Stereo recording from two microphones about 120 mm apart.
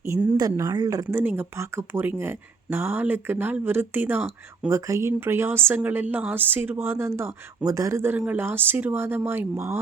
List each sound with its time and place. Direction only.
0.0 s speech: 20° right (ahead or behind)
1.2 s speech: 15° right (ahead or behind)